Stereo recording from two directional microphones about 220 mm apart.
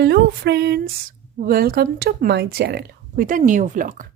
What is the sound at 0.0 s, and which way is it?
A woman's voice, 50° right (ahead or behind).